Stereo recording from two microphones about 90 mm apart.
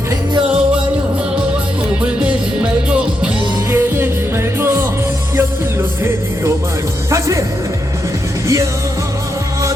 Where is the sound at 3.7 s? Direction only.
30° right (ahead or behind).